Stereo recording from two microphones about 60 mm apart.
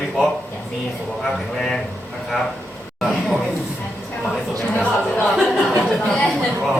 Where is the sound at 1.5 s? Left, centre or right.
Centre.